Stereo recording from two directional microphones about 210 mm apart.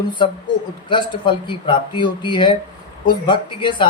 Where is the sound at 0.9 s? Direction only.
25° left (ahead or behind).